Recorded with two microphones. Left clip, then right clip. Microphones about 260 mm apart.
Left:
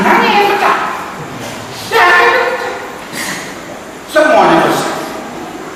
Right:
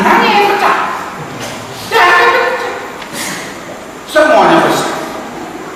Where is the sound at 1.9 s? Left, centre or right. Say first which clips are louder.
Even; centre.